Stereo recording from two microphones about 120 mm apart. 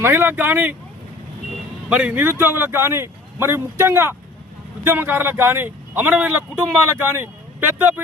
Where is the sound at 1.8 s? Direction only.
10° right (ahead or behind).